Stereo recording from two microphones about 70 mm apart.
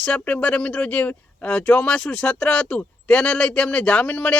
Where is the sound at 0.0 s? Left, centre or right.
Centre.